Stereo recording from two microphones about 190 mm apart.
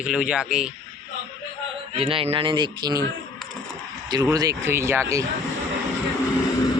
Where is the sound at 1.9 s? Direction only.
30° right (ahead or behind).